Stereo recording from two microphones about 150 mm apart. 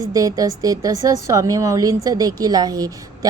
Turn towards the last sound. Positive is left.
turn(degrees=-25)  # may be behind; listen again after turning